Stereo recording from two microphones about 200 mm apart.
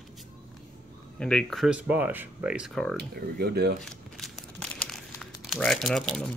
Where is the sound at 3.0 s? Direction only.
50° right (ahead or behind).